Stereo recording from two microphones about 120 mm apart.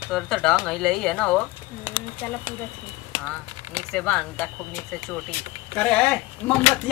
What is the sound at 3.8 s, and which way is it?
A woman's voice, 5° left (ahead or behind).